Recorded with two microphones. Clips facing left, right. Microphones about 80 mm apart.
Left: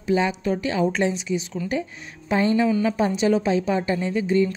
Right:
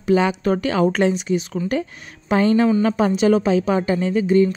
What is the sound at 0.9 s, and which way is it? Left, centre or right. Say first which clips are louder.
A woman's voice: right 4 dB; right.